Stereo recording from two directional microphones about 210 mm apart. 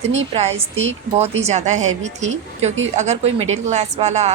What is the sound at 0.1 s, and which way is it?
A woman's voice, 30° right (ahead or behind).